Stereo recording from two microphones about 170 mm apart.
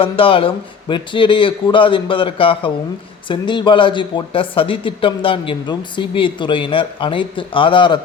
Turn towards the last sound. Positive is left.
turn(degrees=30)  # may be behind; listen again after turning